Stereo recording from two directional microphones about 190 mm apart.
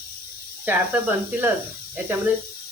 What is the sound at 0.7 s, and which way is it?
Speech, 10° right (ahead or behind).